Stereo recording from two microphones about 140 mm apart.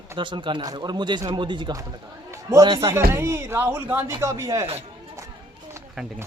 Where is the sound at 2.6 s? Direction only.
35° right (ahead or behind).